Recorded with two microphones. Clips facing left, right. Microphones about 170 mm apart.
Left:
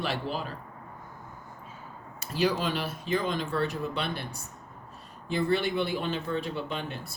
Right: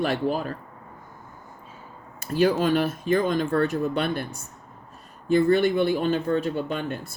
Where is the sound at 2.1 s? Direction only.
50° right (ahead or behind).